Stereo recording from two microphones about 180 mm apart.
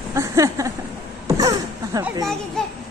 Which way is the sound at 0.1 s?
15° right (ahead or behind).